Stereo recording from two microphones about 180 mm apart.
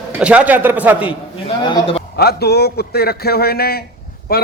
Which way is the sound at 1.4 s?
30° left (ahead or behind).